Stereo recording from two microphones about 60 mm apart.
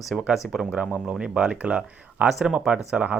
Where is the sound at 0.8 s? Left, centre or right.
Centre.